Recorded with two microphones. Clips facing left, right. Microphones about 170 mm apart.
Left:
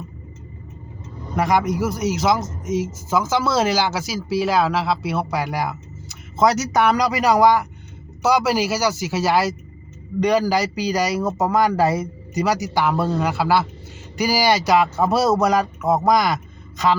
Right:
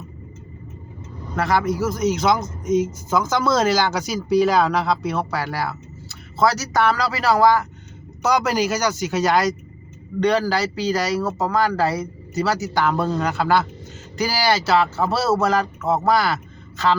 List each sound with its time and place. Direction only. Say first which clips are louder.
1.4 s speech: left 1 dB; 15° left (ahead or behind)